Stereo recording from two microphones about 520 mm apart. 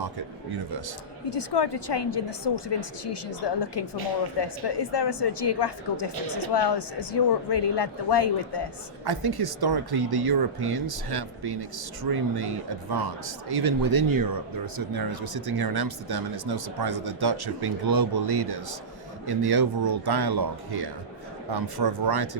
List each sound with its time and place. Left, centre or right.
1.3 s a woman's voice: left
9.0 s speech: right